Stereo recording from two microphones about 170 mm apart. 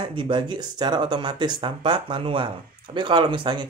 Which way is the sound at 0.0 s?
30° right (ahead or behind).